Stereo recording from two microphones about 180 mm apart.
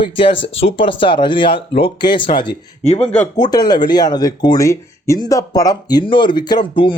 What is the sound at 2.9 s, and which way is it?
Speech, 10° left (ahead or behind).